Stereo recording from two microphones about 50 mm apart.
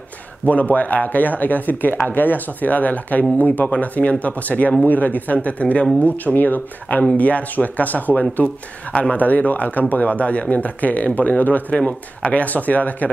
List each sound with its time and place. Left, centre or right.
0.5 s speech: left